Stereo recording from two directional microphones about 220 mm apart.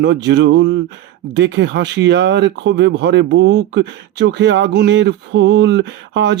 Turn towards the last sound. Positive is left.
turn(degrees=-55)  # may be behind; listen again after turning